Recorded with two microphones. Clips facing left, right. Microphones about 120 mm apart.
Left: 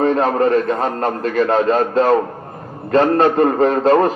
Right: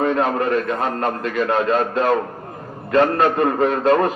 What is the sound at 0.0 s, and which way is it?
A man's voice, 35° left (ahead or behind).